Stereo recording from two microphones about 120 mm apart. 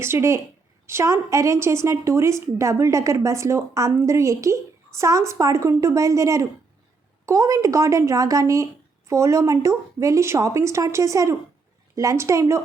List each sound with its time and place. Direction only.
0.0 s a woman's voice: 20° right (ahead or behind)